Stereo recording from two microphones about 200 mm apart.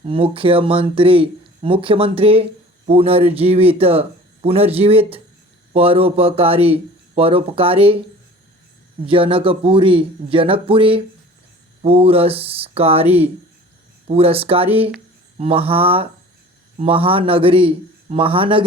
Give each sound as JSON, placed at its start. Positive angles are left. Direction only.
{"t": 0.0, "sound": "speech", "side_deg": -25}
{"t": 9.0, "sound": "speech", "side_deg": -25}